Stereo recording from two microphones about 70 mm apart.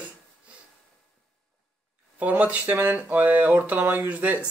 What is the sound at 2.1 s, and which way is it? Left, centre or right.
Speech, right.